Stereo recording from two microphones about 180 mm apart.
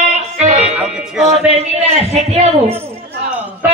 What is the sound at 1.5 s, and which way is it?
A man's voice, 35° right (ahead or behind).